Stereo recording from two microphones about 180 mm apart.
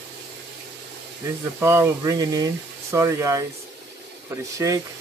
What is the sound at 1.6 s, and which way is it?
Speech, 15° right (ahead or behind).